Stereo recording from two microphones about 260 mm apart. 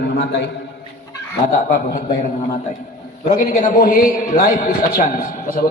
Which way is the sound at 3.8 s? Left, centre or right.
Left.